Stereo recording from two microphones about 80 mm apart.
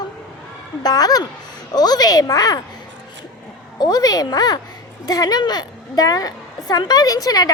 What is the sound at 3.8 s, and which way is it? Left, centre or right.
A woman's voice, left.